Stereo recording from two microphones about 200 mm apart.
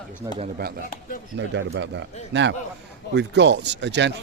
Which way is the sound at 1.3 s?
60° right (ahead or behind).